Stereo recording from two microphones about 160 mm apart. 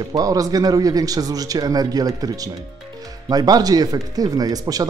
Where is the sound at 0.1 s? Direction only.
25° right (ahead or behind).